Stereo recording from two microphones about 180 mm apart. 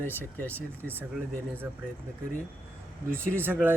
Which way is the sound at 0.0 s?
10° left (ahead or behind).